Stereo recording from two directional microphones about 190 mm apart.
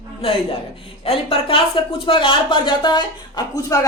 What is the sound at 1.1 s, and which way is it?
A woman's voice, 30° left (ahead or behind).